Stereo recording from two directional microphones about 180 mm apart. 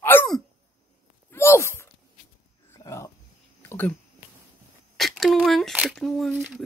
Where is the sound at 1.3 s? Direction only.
15° left (ahead or behind).